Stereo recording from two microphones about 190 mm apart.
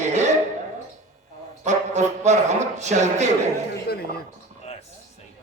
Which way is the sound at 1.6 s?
35° right (ahead or behind).